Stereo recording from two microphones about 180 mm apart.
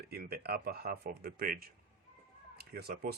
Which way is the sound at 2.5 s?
60° right (ahead or behind).